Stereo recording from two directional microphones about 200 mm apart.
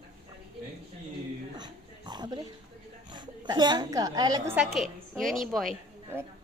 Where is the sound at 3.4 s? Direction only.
20° right (ahead or behind).